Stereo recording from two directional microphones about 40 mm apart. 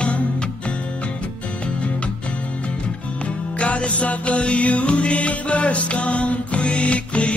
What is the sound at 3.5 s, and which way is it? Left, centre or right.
Music, left.